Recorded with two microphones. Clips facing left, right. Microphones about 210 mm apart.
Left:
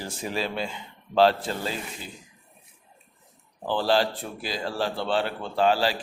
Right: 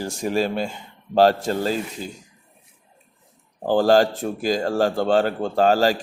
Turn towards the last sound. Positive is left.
turn(degrees=-45)  # may be behind; listen again after turning